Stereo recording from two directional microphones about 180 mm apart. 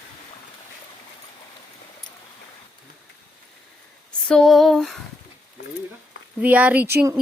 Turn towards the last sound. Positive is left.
turn(degrees=-15)  # may be behind; listen again after turning